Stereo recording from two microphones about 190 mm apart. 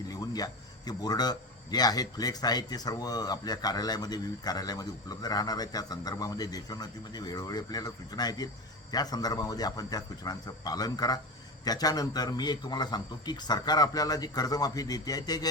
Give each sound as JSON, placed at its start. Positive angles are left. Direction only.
{"t": 0.1, "sound": "a man's voice", "side_deg": 20}